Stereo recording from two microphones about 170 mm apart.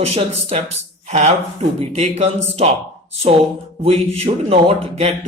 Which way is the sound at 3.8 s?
35° right (ahead or behind).